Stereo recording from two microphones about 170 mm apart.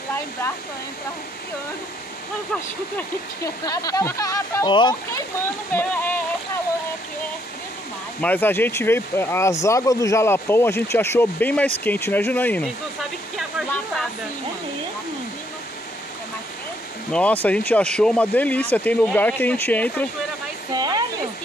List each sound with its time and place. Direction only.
2.5 s speech: 10° left (ahead or behind)
3.6 s speech: 20° left (ahead or behind)
5.7 s a sound: 10° left (ahead or behind)
8.2 s speech: 10° left (ahead or behind)
17.1 s speech: 10° left (ahead or behind)
20.7 s a sound: 25° right (ahead or behind)